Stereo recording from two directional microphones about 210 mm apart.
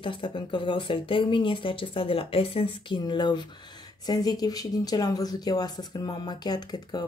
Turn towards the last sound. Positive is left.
turn(degrees=20)  # may be behind; listen again after turning